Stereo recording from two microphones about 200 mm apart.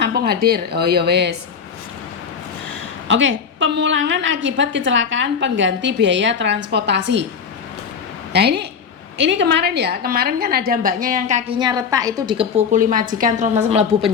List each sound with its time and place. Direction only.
0.0 s a woman's voice: 55° right (ahead or behind)
3.1 s a woman's voice: 70° right (ahead or behind)
8.3 s a woman's voice: 55° right (ahead or behind); by 11.5 s 35° right (ahead or behind)
11.6 s a woman's voice: 20° right (ahead or behind)
12.7 s a woman's voice: 45° right (ahead or behind)